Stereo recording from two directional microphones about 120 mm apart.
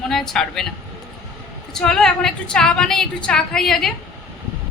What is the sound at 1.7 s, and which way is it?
A woman's voice, 5° left (ahead or behind).